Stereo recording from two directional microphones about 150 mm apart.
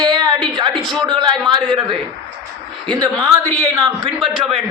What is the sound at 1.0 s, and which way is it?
A man's voice, 30° right (ahead or behind).